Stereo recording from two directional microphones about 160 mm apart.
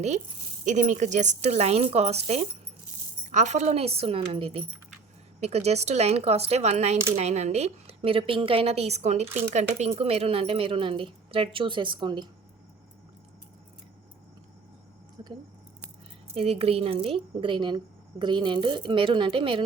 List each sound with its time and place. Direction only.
0.6 s speech: 50° right (ahead or behind); by 12.3 s 30° right (ahead or behind)
15.2 s keys jangling: 25° right (ahead or behind)
16.3 s a woman's voice: 40° right (ahead or behind)